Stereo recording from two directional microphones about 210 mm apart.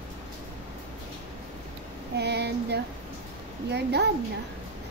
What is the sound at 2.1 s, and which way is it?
A woman's voice, 50° right (ahead or behind).